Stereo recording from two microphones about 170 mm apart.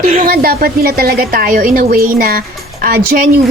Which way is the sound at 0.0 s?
40° right (ahead or behind).